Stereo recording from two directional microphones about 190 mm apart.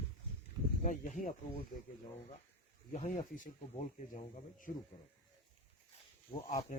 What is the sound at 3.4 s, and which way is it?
Speech, 40° left (ahead or behind).